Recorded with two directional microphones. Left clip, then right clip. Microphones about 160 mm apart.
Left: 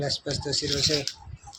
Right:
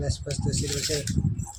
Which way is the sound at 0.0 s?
10° left (ahead or behind).